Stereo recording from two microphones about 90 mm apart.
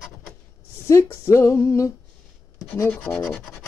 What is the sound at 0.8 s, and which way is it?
Speech, 30° left (ahead or behind).